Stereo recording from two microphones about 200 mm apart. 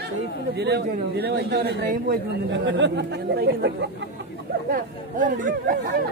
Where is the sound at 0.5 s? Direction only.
55° right (ahead or behind).